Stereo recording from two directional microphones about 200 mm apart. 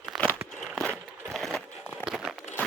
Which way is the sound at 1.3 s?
Centre (ahead or behind).